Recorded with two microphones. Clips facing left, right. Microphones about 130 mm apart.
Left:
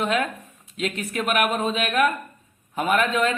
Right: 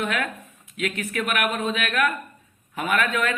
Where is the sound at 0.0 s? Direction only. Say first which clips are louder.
Left 3 dB; 30° left (ahead or behind).